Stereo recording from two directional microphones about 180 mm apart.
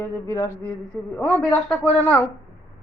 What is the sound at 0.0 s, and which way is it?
Speech, 15° left (ahead or behind).